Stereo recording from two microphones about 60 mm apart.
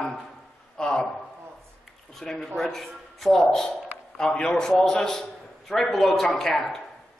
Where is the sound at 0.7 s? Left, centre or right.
Centre.